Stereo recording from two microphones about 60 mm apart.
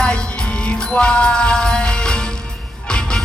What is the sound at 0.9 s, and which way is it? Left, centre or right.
Music, centre.